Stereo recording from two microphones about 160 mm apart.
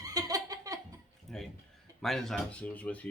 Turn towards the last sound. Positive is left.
turn(degrees=10)  # may be behind; listen again after turning